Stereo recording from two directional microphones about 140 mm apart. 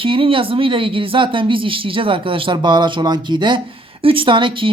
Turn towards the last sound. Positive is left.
turn(degrees=-35)  # may be behind; listen again after turning